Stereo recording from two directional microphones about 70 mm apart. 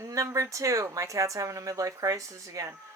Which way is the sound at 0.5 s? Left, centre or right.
Right.